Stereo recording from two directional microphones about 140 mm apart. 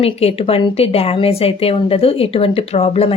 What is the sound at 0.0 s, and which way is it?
Speech, 45° left (ahead or behind).